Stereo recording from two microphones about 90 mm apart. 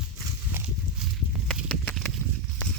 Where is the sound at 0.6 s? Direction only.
25° right (ahead or behind).